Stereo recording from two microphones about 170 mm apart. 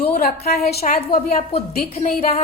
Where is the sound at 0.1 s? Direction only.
60° left (ahead or behind).